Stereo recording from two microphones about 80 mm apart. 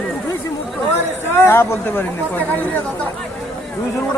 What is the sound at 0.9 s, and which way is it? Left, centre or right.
Speech, left.